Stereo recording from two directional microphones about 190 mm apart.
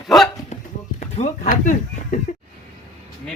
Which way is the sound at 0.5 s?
35° left (ahead or behind).